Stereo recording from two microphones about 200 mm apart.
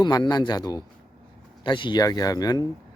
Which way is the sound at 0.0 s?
20° left (ahead or behind).